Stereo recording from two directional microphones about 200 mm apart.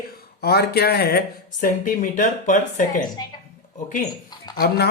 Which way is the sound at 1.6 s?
40° left (ahead or behind).